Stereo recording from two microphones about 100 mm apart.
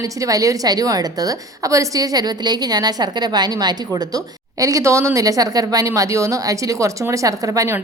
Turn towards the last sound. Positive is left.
turn(degrees=-30)  # may be behind; listen again after turning